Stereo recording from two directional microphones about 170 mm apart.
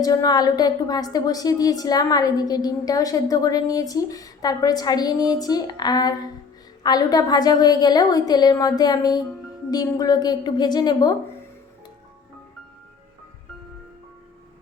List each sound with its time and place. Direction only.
0.0 s a woman's voice: 20° left (ahead or behind)